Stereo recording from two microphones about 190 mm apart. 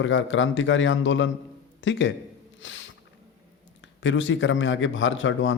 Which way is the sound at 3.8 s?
75° left (ahead or behind).